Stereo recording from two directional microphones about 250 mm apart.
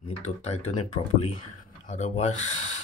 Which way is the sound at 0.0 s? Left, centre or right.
Left.